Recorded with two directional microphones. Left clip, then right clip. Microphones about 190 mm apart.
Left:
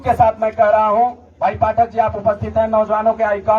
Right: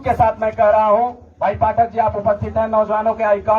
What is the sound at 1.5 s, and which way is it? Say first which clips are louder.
A man's voice: left 1 dB; 25° right (ahead or behind).